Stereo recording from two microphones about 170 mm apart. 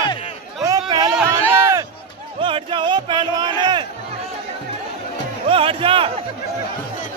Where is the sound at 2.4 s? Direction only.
30° right (ahead or behind).